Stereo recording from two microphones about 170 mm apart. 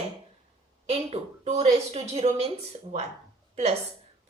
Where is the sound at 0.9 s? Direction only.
40° right (ahead or behind).